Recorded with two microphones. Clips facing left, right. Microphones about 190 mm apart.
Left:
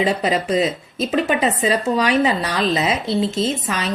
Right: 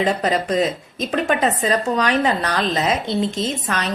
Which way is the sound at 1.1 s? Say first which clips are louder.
Even; centre (ahead or behind).